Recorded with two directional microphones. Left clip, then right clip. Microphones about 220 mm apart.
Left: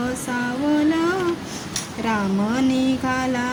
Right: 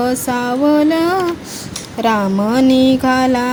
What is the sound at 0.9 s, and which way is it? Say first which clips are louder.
Mantra: right 6 dB; 30° right (ahead or behind).